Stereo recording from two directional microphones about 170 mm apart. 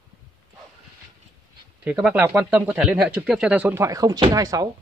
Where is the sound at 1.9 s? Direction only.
10° right (ahead or behind).